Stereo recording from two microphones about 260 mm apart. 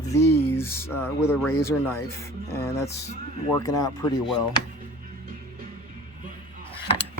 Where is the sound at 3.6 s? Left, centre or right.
Centre.